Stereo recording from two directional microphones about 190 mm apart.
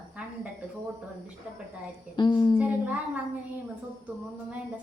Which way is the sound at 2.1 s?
20° left (ahead or behind).